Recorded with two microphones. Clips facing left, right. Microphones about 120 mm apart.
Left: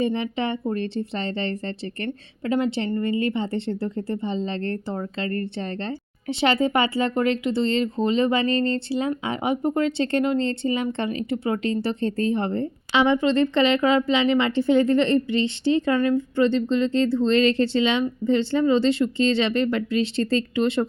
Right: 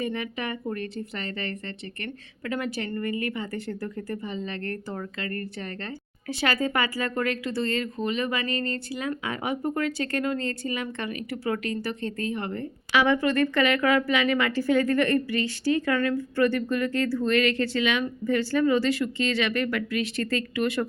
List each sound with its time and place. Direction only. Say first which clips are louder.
0.0 s a woman's voice: left 6 dB; 25° left (ahead or behind)